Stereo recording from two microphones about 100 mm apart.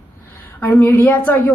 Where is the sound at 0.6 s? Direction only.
20° left (ahead or behind).